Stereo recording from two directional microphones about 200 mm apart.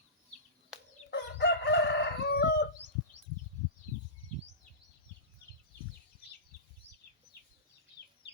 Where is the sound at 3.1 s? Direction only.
30° right (ahead or behind).